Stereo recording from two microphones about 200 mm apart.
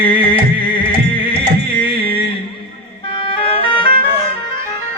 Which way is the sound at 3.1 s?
25° left (ahead or behind).